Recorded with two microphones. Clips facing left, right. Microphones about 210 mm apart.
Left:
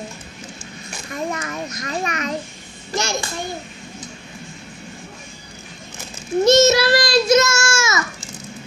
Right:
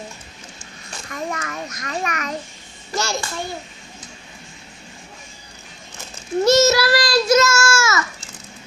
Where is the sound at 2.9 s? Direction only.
15° left (ahead or behind).